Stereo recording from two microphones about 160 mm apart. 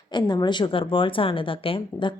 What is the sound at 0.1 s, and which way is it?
A woman's voice, 25° left (ahead or behind).